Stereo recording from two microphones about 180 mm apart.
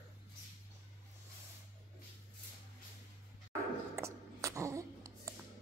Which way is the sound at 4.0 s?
15° right (ahead or behind).